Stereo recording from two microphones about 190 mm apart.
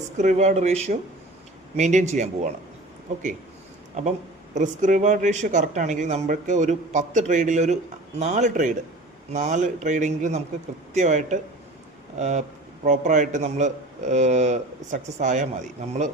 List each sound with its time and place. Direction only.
0.2 s a man's voice: 40° right (ahead or behind)
4.5 s a man's voice: 40° right (ahead or behind)